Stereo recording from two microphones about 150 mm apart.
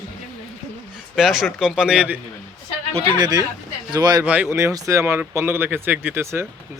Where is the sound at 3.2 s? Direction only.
25° right (ahead or behind).